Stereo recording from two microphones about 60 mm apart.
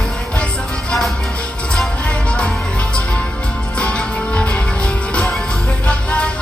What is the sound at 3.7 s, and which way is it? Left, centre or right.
Music, centre.